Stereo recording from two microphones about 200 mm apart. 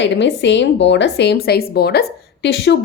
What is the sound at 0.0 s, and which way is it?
Speech, 65° left (ahead or behind).